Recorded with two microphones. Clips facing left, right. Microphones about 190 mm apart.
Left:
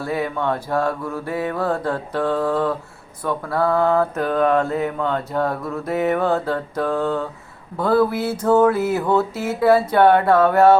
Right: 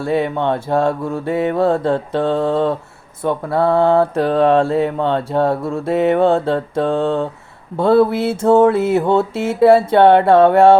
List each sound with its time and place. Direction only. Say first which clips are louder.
0.0 s mantra: right 5 dB; 25° right (ahead or behind)